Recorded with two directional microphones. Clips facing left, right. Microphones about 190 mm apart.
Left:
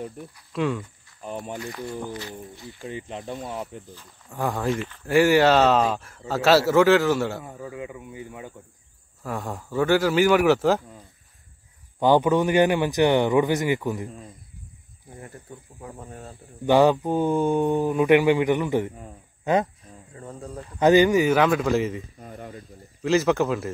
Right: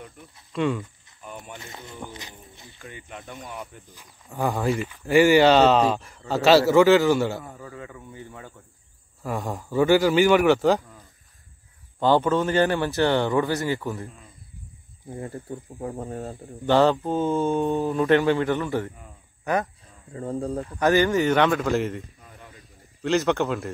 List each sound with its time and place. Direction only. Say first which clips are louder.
0.5 s speech: right 1 dB; centre (ahead or behind)
1.2 s a sound: left 7 dB; 35° left (ahead or behind)
2.5 s speech: left 8 dB; 20° right (ahead or behind)
2.8 s speech: left 7 dB; 30° left (ahead or behind)
4.3 s speech: right 1 dB; centre (ahead or behind)
7.4 s speech: left 4 dB; 15° left (ahead or behind)
9.2 s speech: right 2 dB; centre (ahead or behind)
12.0 s speech: left 2 dB; 15° left (ahead or behind)
15.1 s speech: right 8 dB; 30° right (ahead or behind)
16.6 s speech: left 1 dB; 15° left (ahead or behind)
20.2 s speech: right 9 dB; 35° right (ahead or behind)
20.8 s speech: left 3 dB; 15° left (ahead or behind)
21.3 s speech: left 1 dB; 5° left (ahead or behind)
23.0 s speech: left 2 dB; centre (ahead or behind)